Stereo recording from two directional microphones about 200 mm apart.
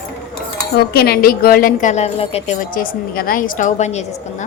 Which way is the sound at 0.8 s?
50° left (ahead or behind).